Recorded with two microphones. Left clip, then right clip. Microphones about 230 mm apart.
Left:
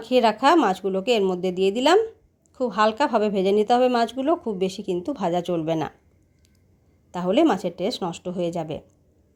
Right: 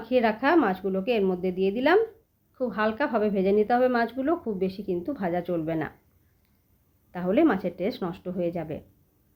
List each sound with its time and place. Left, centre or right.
0.0 s speech: left
7.1 s speech: left